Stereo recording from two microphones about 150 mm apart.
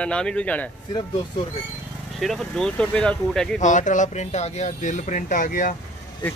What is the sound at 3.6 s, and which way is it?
Speech, 55° left (ahead or behind).